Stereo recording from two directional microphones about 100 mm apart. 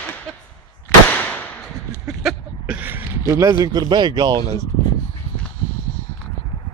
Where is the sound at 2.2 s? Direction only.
10° right (ahead or behind).